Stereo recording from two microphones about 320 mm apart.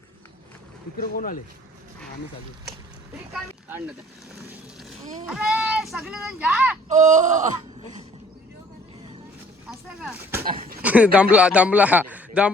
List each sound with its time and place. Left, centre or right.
0.9 s speech: left
5.3 s a man's voice: centre
6.8 s speech: right
9.6 s a man's voice: centre
10.4 s speech: right
10.8 s a man's voice: centre